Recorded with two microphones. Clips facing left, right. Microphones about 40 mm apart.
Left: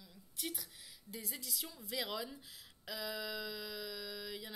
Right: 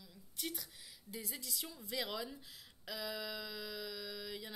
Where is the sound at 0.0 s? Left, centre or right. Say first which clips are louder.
Even; centre.